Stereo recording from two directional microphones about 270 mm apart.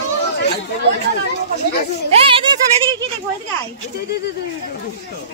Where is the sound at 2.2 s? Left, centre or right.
Centre.